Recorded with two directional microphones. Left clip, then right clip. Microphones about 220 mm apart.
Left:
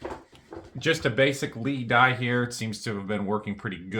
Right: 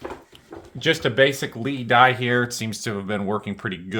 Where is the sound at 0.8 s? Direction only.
30° right (ahead or behind).